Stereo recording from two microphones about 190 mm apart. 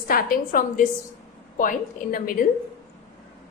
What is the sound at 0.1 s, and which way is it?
Speech, 50° left (ahead or behind).